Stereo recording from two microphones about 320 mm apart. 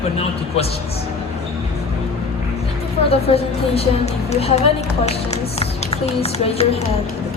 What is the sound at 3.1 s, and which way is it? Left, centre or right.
A woman's voice, centre.